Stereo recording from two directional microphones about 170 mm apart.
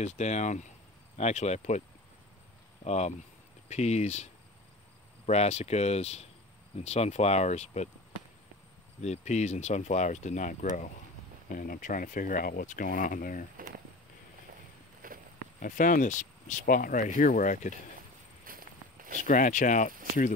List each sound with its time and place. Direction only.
0.0 s speech: 45° left (ahead or behind)
2.8 s speech: 40° left (ahead or behind)
9.0 s speech: 40° left (ahead or behind)
15.0 s walk: 55° right (ahead or behind)
15.6 s speech: 50° left (ahead or behind)
18.4 s walk: 55° right (ahead or behind)
19.2 s speech: 50° left (ahead or behind)